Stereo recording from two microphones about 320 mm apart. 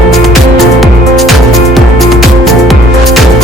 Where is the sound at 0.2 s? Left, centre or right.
Centre.